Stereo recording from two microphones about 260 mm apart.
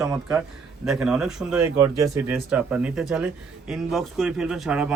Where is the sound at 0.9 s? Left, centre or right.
Centre.